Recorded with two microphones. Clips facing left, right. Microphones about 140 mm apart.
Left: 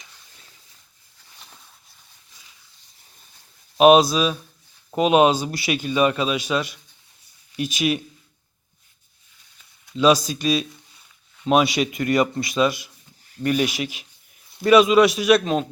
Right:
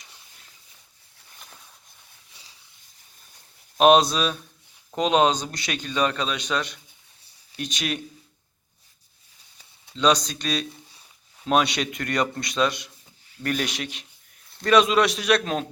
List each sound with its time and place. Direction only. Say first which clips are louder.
3.8 s a man's voice: left 3 dB; 5° left (ahead or behind)
9.9 s speech: left 4 dB; 5° left (ahead or behind)